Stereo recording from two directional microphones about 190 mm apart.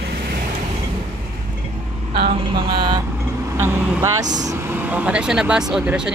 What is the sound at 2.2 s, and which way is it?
Speech, 30° right (ahead or behind).